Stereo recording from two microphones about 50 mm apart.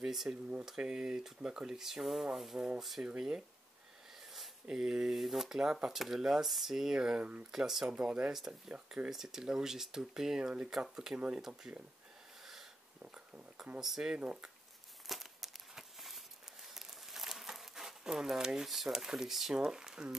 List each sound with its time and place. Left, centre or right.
0.0 s speech: centre
2.3 s rub: centre
3.2 s speech: centre
4.7 s speech: centre
7.2 s speech: right
7.5 s speech: centre
13.7 s speech: centre
14.1 s speech: right
15.0 s a sound: centre
16.6 s crumpling: centre
18.7 s speech: centre